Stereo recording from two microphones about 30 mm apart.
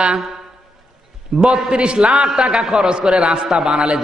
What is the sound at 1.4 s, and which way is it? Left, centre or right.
A man's voice, right.